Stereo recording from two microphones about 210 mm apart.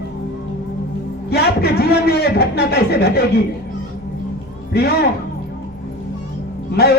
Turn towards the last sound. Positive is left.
turn(degrees=50)  # may be behind; listen again after turning